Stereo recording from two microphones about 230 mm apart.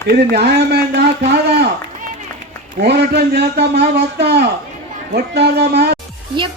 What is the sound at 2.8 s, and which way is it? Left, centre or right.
A man's voice, right.